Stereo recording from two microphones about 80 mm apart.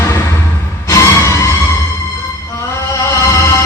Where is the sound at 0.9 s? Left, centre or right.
Left.